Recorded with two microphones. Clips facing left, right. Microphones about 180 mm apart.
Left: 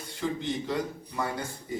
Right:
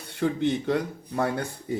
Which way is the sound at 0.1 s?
60° right (ahead or behind).